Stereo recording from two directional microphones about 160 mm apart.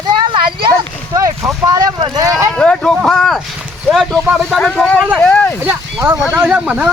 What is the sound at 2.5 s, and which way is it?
Speech, 5° left (ahead or behind).